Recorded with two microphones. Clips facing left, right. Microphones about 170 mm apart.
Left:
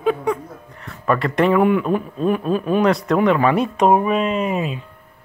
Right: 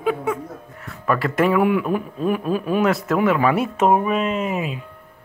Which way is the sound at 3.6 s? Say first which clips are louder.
Left 2 dB; 15° left (ahead or behind).